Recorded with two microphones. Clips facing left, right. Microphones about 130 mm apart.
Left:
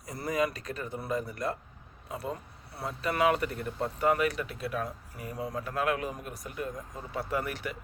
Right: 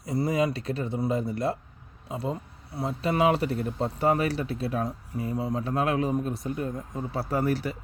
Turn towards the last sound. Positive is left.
turn(degrees=-35)  # may be behind; listen again after turning